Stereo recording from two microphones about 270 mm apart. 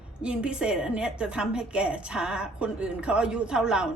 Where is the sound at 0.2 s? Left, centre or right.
Centre.